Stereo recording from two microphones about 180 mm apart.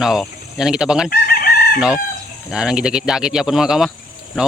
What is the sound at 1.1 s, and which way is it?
Chicken, 55° left (ahead or behind).